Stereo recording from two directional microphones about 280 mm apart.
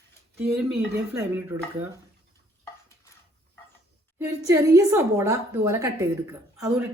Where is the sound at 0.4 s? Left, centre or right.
Centre.